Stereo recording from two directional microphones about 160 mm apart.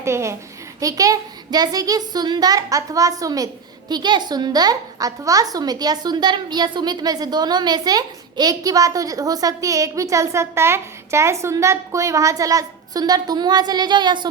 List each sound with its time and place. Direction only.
0.0 s a child's voice: 15° right (ahead or behind)